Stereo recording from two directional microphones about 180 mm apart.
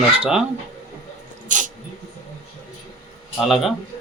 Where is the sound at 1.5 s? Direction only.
45° right (ahead or behind).